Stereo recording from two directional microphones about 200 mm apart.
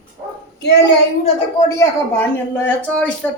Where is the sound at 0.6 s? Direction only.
55° left (ahead or behind).